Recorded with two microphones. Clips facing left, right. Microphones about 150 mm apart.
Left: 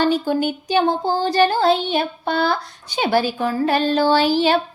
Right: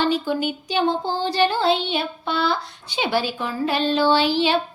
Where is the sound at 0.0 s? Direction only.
45° left (ahead or behind).